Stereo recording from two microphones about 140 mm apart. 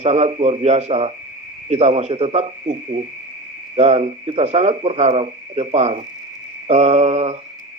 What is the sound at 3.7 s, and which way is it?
A man's voice, 50° right (ahead or behind).